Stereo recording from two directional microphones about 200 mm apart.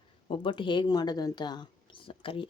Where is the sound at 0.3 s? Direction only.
25° left (ahead or behind).